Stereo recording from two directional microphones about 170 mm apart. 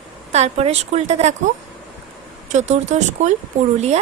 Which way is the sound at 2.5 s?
45° right (ahead or behind).